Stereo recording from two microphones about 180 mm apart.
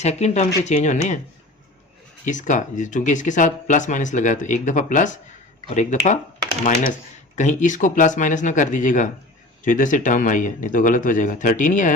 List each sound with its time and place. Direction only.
0.0 s speech: 40° left (ahead or behind)
2.2 s speech: 45° left (ahead or behind)
7.3 s speech: 45° left (ahead or behind)